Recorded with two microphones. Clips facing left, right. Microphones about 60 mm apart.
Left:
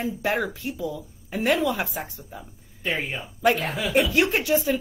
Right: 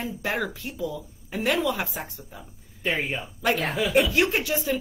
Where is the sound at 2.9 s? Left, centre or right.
Right.